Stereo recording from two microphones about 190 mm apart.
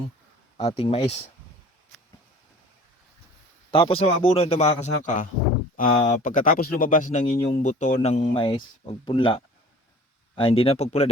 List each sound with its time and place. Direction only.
0.5 s speech: 30° left (ahead or behind)
3.7 s speech: 30° left (ahead or behind)